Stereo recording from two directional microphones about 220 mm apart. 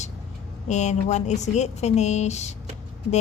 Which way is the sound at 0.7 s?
30° left (ahead or behind).